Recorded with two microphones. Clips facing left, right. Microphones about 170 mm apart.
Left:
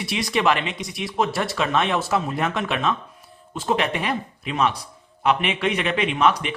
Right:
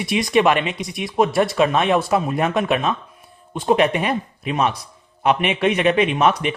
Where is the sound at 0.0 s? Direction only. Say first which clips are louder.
Right 5 dB; 20° right (ahead or behind).